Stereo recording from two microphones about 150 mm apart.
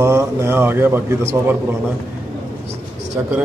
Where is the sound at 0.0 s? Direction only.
20° right (ahead or behind).